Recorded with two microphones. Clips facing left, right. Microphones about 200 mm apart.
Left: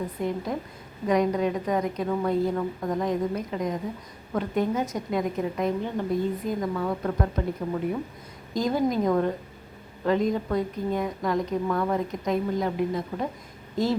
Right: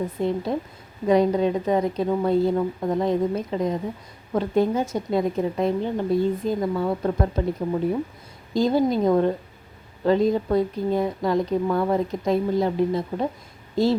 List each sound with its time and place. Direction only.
0.2 s a woman's voice: 30° right (ahead or behind)
8.5 s a woman's voice: 30° right (ahead or behind)